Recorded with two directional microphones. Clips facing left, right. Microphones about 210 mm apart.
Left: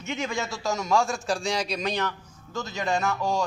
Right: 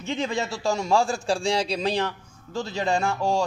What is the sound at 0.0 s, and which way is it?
A man's voice, 30° right (ahead or behind).